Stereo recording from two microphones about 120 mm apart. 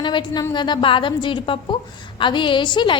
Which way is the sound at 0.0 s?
40° left (ahead or behind).